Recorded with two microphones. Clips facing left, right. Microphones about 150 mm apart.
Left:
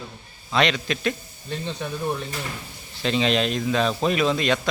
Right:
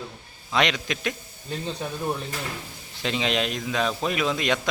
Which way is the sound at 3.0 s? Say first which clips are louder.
Left 4 dB; 15° right (ahead or behind).